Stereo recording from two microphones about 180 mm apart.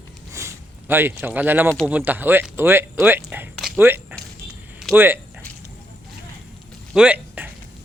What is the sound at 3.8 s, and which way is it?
Speech, 10° right (ahead or behind).